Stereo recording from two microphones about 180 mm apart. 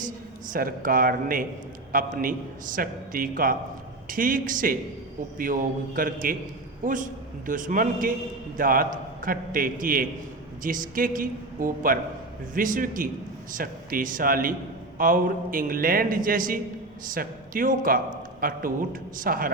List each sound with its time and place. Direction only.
0.5 s a man's voice: 50° right (ahead or behind)